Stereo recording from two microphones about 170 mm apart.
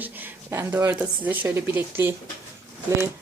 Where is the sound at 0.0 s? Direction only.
10° right (ahead or behind).